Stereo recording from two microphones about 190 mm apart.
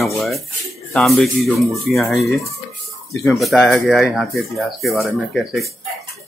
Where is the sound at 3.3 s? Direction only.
Centre (ahead or behind).